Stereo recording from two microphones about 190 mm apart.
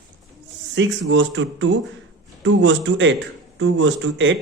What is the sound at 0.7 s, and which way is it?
A man's voice, 80° right.